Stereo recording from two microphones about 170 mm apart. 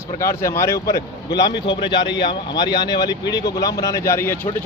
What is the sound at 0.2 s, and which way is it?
A man's voice, 15° left (ahead or behind).